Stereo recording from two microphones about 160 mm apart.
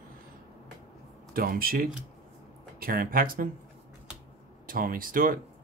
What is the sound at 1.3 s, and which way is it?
Speech, 65° right (ahead or behind).